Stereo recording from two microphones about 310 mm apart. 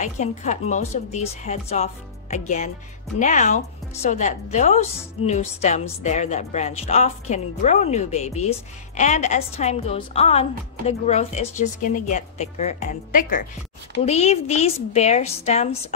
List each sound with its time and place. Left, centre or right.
0.0 s a woman's voice: left